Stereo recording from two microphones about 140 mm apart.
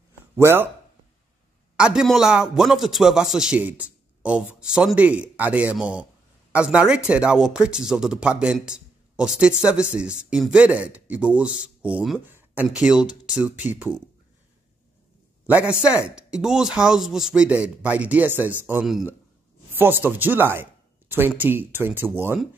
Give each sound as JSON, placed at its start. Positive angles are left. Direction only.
{"t": 0.4, "sound": "a man's voice", "side_deg": -15}
{"t": 1.8, "sound": "a man's voice", "side_deg": -5}
{"t": 12.3, "sound": "a sound", "side_deg": -15}
{"t": 12.6, "sound": "a man's voice", "side_deg": -5}
{"t": 15.4, "sound": "a man's voice", "side_deg": -10}